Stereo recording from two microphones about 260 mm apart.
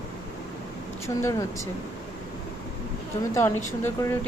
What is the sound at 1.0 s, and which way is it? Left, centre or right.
Speech, centre.